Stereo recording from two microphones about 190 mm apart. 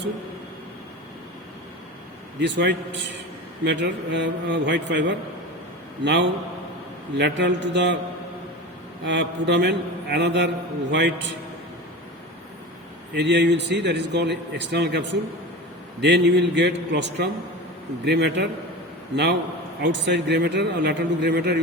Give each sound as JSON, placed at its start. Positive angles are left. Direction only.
{"t": 2.4, "sound": "a man's voice", "side_deg": -65}
{"t": 9.0, "sound": "a man's voice", "side_deg": -65}
{"t": 13.1, "sound": "speech", "side_deg": -65}